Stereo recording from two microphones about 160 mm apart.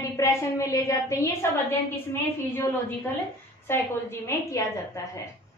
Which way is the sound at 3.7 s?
15° left (ahead or behind).